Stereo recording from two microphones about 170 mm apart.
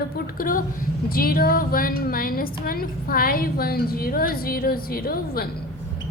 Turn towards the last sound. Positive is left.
turn(degrees=60)  # may be behind; listen again after turning